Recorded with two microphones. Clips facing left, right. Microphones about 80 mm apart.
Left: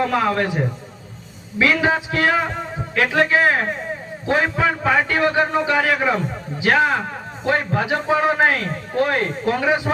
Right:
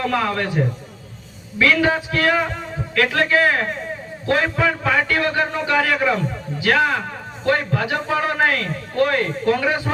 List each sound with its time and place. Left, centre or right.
0.0 s a man's voice: centre